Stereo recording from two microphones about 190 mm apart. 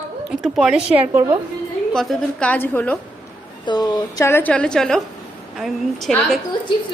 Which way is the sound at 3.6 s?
20° left (ahead or behind).